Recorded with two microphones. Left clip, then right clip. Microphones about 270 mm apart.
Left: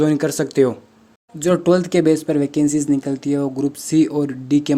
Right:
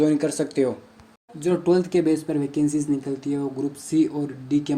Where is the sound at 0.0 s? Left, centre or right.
Left.